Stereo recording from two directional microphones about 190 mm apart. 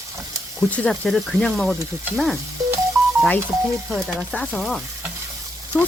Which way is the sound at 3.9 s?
Centre (ahead or behind).